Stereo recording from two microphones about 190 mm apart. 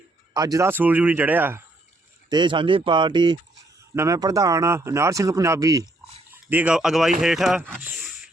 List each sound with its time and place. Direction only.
0.3 s speech: 20° right (ahead or behind)
2.3 s speech: 25° right (ahead or behind); by 8.1 s 5° right (ahead or behind)